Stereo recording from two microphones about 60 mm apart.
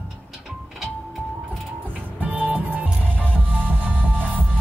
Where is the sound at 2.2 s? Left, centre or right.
Right.